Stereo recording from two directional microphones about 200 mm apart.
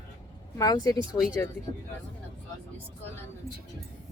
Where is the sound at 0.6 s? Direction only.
20° left (ahead or behind).